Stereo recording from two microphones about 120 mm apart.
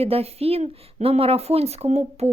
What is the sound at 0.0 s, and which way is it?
A woman's voice, 60° right (ahead or behind).